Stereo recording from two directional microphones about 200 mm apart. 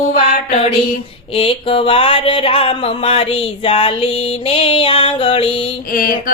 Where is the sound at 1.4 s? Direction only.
30° left (ahead or behind).